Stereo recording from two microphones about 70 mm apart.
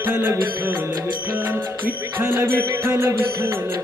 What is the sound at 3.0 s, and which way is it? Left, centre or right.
Music, right.